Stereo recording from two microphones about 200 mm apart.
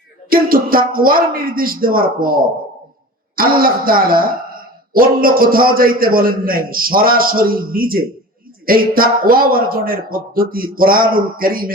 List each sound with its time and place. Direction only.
0.3 s speech: 45° right (ahead or behind)